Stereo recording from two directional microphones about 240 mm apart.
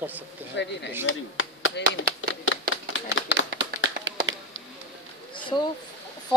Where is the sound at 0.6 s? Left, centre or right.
Left.